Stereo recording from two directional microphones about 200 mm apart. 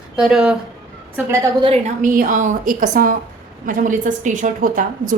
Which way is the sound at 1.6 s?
35° right (ahead or behind).